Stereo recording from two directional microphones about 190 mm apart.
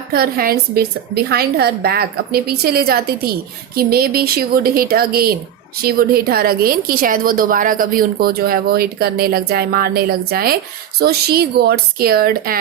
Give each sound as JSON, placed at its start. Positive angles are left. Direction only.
{"t": 0.1, "sound": "a woman's voice", "side_deg": -50}